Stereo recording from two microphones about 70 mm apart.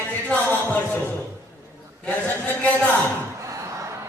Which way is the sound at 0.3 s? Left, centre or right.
Left.